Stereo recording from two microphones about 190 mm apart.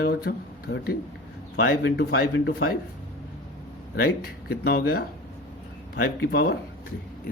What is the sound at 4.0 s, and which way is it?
Speech, 55° left (ahead or behind).